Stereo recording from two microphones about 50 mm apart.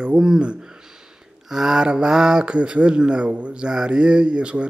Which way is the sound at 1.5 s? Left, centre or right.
Centre.